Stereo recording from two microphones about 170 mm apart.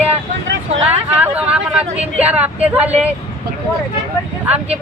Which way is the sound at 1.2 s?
10° right (ahead or behind).